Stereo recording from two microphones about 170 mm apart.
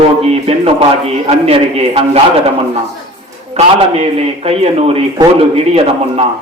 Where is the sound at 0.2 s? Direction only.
35° right (ahead or behind).